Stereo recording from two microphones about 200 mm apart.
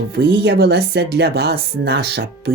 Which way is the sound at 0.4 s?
55° right (ahead or behind).